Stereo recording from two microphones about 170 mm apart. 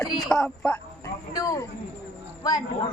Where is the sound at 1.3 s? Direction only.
20° left (ahead or behind).